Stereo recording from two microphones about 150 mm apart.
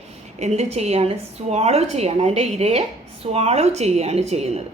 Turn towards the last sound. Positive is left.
turn(degrees=-45)  # may be behind; listen again after turning